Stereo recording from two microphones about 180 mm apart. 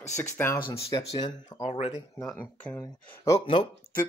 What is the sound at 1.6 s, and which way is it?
Speech, 40° left (ahead or behind).